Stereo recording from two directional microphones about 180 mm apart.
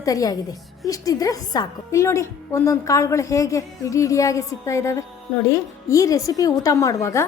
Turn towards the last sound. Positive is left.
turn(degrees=15)  # may be behind; listen again after turning